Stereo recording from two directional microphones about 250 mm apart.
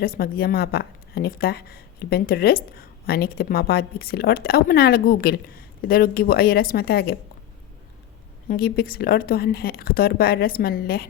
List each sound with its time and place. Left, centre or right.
0.0 s a woman's voice: left
8.4 s a woman's voice: left